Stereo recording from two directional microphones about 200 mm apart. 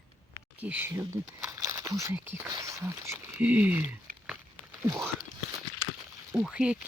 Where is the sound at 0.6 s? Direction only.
10° right (ahead or behind).